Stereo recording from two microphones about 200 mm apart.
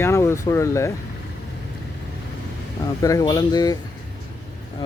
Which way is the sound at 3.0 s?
20° left (ahead or behind).